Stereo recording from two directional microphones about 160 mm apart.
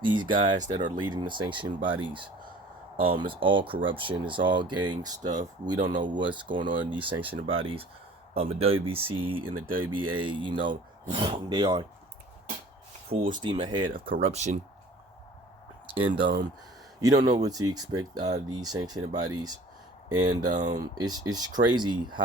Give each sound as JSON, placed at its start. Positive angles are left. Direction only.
{"t": 0.0, "sound": "speech", "side_deg": -30}
{"t": 13.1, "sound": "speech", "side_deg": -60}
{"t": 13.4, "sound": "speech", "side_deg": -30}
{"t": 16.0, "sound": "speech", "side_deg": -30}